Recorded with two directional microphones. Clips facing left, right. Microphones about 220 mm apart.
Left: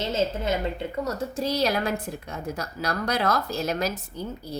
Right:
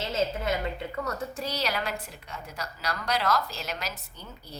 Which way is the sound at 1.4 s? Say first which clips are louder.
Left 10 dB; 45° left (ahead or behind).